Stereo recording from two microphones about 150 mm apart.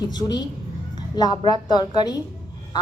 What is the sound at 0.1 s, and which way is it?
Speech, 25° left (ahead or behind).